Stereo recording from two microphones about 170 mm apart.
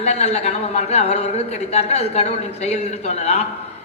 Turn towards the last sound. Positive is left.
turn(degrees=40)  # may be behind; listen again after turning